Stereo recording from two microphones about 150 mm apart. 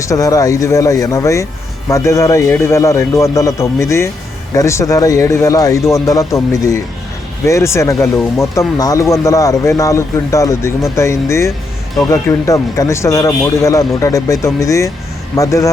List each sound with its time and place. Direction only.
0.0 s speech: 20° left (ahead or behind)